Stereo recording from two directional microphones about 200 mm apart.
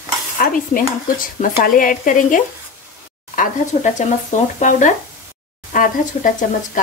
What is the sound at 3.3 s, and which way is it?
A woman's voice, 40° left (ahead or behind).